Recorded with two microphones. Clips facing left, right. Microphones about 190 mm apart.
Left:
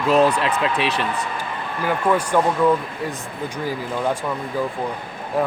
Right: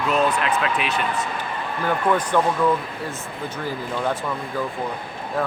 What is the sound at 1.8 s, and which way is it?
Speech, 10° left (ahead or behind).